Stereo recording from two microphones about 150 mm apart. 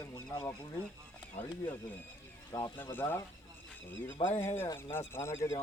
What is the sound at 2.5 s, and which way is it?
Speech, 25° left (ahead or behind).